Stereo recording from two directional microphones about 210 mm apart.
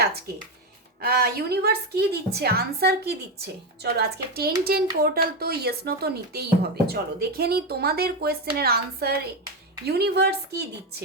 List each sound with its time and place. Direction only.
1.0 s a woman's voice: 45° right (ahead or behind)